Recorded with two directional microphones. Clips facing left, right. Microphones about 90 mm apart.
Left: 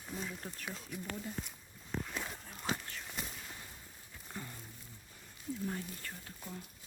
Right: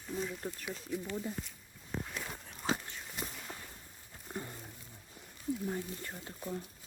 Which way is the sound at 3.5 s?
40° right (ahead or behind).